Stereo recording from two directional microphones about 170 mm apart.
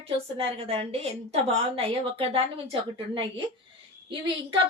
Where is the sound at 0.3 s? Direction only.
35° right (ahead or behind).